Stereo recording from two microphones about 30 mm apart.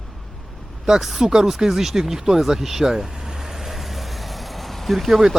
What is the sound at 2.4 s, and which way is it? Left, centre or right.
Vehicle, centre.